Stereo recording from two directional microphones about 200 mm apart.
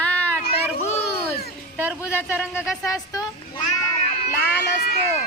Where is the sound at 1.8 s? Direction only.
5° right (ahead or behind).